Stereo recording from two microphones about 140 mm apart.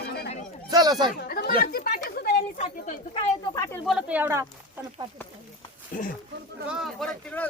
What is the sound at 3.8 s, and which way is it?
Speech, 5° right (ahead or behind).